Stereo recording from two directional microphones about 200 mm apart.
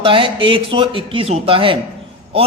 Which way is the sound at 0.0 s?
25° right (ahead or behind).